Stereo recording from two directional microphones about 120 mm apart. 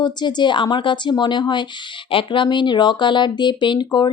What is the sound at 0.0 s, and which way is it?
Speech, 35° left (ahead or behind).